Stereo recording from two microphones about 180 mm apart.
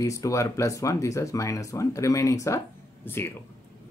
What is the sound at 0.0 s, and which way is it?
Speech, 15° left (ahead or behind).